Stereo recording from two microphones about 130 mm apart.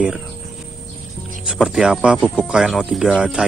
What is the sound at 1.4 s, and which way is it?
Speech, 5° right (ahead or behind).